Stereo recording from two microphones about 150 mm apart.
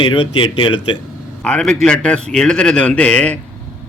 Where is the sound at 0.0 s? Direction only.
35° left (ahead or behind).